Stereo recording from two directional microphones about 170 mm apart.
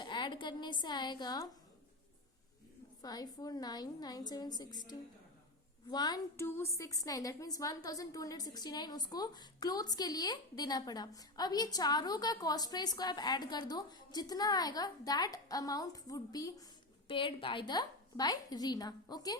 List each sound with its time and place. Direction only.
0.0 s a woman's voice: 25° left (ahead or behind)
3.0 s a woman's voice: 25° left (ahead or behind)
5.9 s a woman's voice: 25° left (ahead or behind)